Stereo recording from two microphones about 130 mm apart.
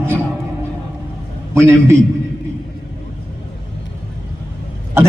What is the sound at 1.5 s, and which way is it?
Speech, 20° right (ahead or behind).